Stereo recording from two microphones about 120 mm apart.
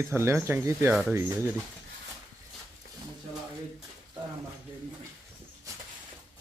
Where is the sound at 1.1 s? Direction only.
20° right (ahead or behind).